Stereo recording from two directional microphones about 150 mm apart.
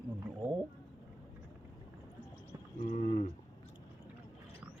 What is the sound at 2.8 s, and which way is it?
Speech, 55° left (ahead or behind).